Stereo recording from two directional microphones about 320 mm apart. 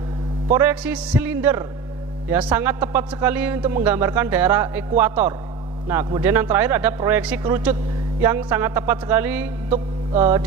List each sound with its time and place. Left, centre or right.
0.6 s a man's voice: centre
9.7 s mantra: centre